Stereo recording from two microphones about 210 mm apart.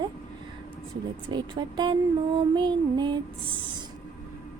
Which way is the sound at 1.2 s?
20° right (ahead or behind).